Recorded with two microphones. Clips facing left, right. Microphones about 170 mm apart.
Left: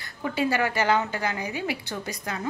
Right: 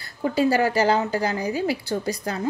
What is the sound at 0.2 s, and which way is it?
A woman's voice, 35° right (ahead or behind).